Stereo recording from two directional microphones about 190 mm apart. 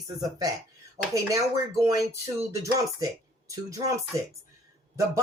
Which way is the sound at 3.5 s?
15° right (ahead or behind).